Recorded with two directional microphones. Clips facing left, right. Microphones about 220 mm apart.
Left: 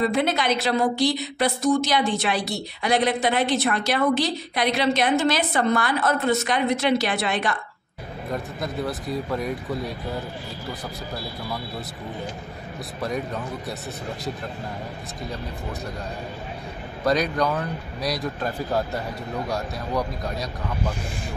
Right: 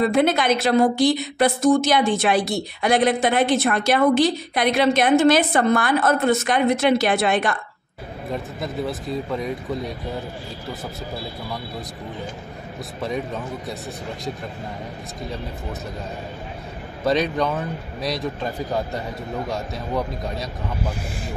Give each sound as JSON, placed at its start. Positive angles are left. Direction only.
{"t": 0.1, "sound": "a woman's voice", "side_deg": -50}
{"t": 8.3, "sound": "speech", "side_deg": 0}
{"t": 13.0, "sound": "speech", "side_deg": 0}
{"t": 17.4, "sound": "speech", "side_deg": 0}
{"t": 20.0, "sound": "speech", "side_deg": -5}